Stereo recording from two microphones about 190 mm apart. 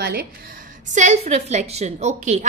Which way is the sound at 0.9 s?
35° right (ahead or behind).